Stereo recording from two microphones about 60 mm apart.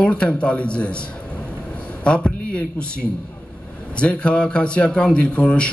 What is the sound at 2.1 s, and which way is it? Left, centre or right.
A man's voice, centre.